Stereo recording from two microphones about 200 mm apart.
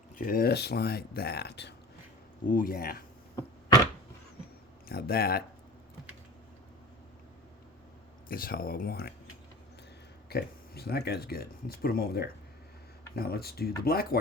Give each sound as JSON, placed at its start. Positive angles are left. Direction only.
{"t": 0.2, "sound": "speech", "side_deg": 45}
{"t": 2.5, "sound": "speech", "side_deg": 45}
{"t": 4.9, "sound": "speech", "side_deg": 50}
{"t": 8.3, "sound": "speech", "side_deg": 45}
{"t": 10.2, "sound": "speech", "side_deg": 50}